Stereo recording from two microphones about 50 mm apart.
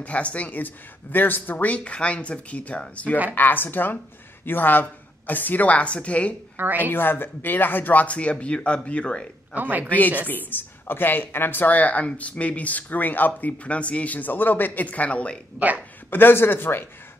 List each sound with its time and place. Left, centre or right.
0.0 s speech: left
3.3 s speech: left
6.5 s a woman's voice: right
6.8 s speech: left
9.5 s speech: right
9.8 s speech: left
15.6 s speech: right
16.1 s a man's voice: left